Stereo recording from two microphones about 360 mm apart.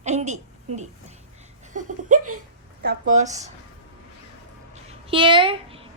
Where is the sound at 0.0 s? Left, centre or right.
Centre.